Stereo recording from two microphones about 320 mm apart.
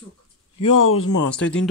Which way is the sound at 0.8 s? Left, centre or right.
Left.